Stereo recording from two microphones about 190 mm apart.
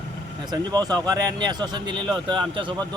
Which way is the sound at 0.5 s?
20° right (ahead or behind).